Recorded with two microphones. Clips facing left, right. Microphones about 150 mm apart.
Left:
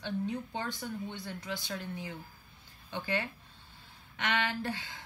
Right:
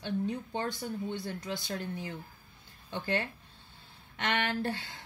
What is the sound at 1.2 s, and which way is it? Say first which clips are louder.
Speech: right 3 dB; 45° right (ahead or behind).